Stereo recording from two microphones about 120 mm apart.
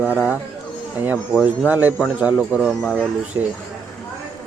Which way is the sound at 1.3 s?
10° right (ahead or behind).